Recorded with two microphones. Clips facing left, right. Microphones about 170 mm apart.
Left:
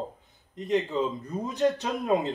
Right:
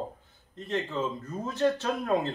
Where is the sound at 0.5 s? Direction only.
15° left (ahead or behind).